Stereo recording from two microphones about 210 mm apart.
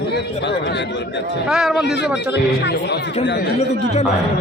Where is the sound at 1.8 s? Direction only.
55° left (ahead or behind).